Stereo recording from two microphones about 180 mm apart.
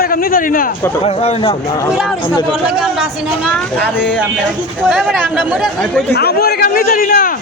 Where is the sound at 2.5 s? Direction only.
5° right (ahead or behind).